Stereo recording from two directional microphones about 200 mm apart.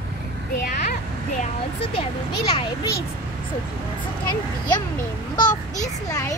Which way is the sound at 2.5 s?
25° left (ahead or behind).